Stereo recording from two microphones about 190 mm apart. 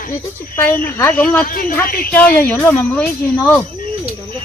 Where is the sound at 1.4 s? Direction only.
50° left (ahead or behind).